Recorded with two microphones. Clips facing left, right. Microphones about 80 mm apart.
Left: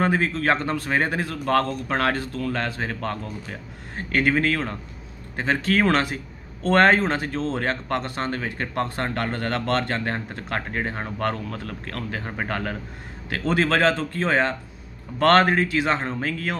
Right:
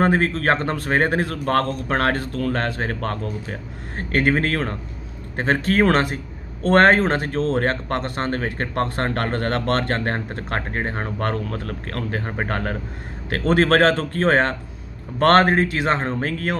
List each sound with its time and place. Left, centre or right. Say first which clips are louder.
0.0 s a man's voice: right 3 dB; right
15.1 s speech: right 2 dB; right